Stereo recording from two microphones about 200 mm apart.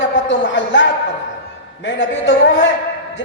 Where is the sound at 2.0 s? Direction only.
65° left (ahead or behind).